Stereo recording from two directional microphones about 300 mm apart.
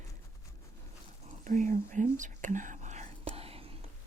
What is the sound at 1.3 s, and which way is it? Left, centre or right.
Whispering, right.